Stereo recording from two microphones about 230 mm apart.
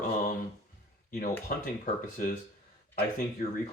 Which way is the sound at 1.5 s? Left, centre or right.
Left.